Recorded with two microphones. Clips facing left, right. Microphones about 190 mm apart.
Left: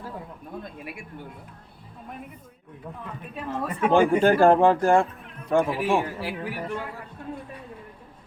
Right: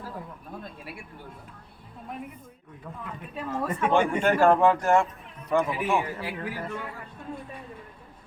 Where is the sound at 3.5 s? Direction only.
30° left (ahead or behind).